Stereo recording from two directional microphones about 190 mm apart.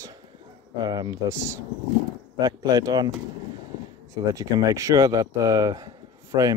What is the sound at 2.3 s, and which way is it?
Speech, 20° right (ahead or behind).